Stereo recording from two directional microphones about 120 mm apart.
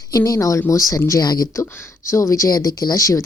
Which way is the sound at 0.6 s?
25° left (ahead or behind).